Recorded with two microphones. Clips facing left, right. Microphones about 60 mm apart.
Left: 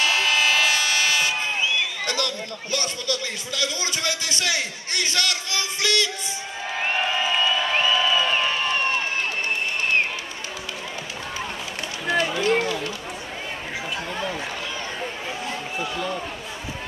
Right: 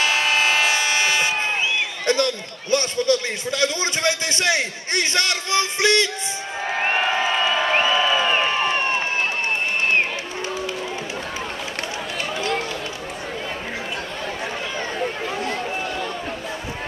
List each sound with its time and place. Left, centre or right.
0.0 s train: right
6.7 s a sound: right
12.1 s run: left